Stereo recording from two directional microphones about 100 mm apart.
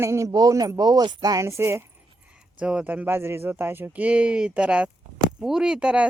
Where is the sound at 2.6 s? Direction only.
10° right (ahead or behind).